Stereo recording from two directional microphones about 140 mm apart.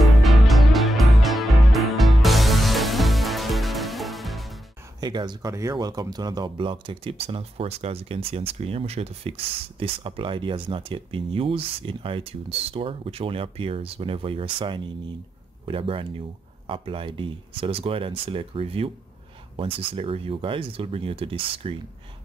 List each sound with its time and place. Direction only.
0.0 s music: centre (ahead or behind)
5.0 s speech: 30° right (ahead or behind)